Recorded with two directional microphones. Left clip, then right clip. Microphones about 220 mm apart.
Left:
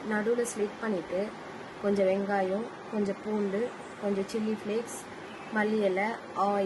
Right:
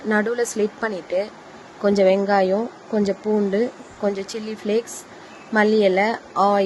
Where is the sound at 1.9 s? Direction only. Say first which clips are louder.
Right 11 dB; 40° right (ahead or behind).